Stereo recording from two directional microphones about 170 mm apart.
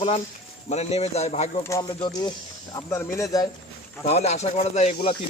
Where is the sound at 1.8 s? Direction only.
25° left (ahead or behind).